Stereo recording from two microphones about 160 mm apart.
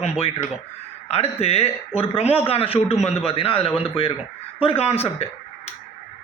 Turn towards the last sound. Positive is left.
turn(degrees=40)  # may be behind; listen again after turning